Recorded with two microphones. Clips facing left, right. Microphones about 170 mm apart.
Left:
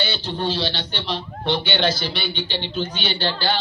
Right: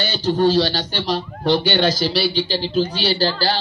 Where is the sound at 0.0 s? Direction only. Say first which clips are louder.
Right 8 dB; 40° right (ahead or behind).